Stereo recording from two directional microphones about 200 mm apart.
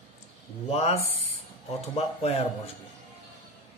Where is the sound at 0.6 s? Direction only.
30° left (ahead or behind).